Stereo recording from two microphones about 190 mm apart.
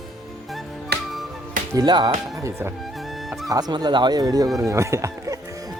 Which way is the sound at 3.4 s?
20° right (ahead or behind).